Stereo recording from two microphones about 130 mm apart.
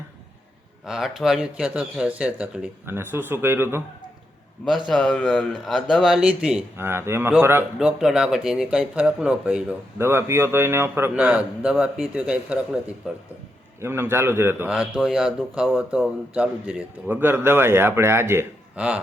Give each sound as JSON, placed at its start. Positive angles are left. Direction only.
{"t": 0.9, "sound": "speech", "side_deg": -5}
{"t": 4.9, "sound": "speech", "side_deg": 10}
{"t": 6.7, "sound": "a man's voice", "side_deg": -20}
{"t": 7.8, "sound": "speech", "side_deg": -5}
{"t": 10.0, "sound": "speech", "side_deg": -20}
{"t": 13.8, "sound": "a man's voice", "side_deg": -20}
{"t": 14.7, "sound": "speech", "side_deg": -5}